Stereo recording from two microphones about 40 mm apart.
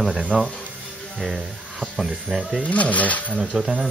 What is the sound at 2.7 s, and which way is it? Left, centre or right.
Speech, left.